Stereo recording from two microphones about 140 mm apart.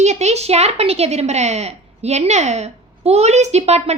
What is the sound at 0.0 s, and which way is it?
A woman's voice, 55° right (ahead or behind).